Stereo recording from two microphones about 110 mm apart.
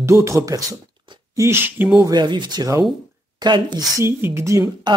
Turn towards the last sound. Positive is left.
turn(degrees=-45)  # may be behind; listen again after turning